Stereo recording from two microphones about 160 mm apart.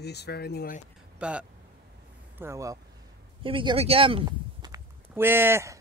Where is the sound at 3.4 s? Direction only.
35° right (ahead or behind).